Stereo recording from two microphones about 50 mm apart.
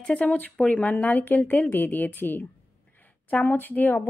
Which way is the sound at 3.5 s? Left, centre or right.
Left.